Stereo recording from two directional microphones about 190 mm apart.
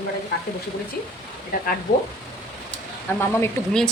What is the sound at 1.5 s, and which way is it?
Speech, 50° left (ahead or behind).